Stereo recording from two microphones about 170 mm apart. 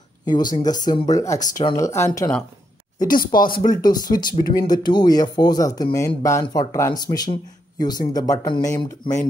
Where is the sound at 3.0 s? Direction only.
55° left (ahead or behind).